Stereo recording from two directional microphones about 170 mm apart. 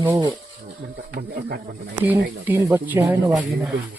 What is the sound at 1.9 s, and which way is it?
Speech, 10° right (ahead or behind).